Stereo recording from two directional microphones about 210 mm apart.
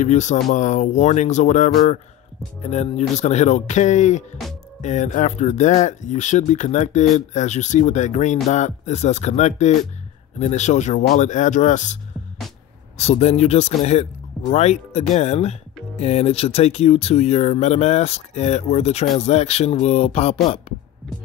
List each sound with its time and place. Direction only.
0.0 s speech: 35° left (ahead or behind)